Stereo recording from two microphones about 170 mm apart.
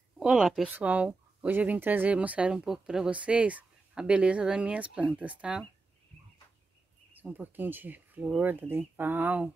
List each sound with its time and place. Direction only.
0.2 s speech: 5° right (ahead or behind)
7.2 s speech: 10° right (ahead or behind)